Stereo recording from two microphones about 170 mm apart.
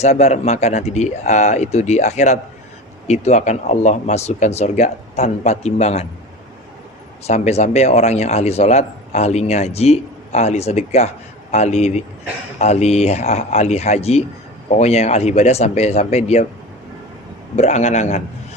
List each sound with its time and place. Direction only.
0.0 s speech: 40° left (ahead or behind)
7.3 s speech: 40° left (ahead or behind)
17.6 s speech: 40° left (ahead or behind)